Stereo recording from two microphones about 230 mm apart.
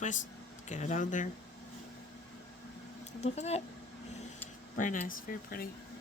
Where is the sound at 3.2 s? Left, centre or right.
Left.